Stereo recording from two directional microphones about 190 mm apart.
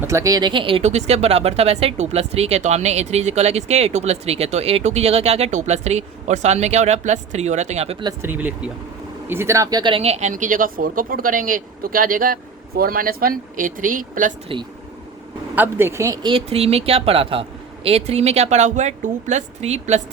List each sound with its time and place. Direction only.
0.0 s speech: 15° right (ahead or behind); by 7.9 s 35° right (ahead or behind)
8.0 s speech: 10° right (ahead or behind); by 14.3 s 45° right (ahead or behind)
15.5 s speech: 10° right (ahead or behind)
16.3 s speech: 30° right (ahead or behind)